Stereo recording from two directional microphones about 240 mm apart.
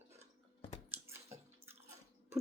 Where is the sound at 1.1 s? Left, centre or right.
Centre.